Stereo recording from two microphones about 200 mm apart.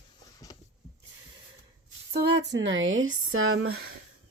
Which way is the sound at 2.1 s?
60° right (ahead or behind).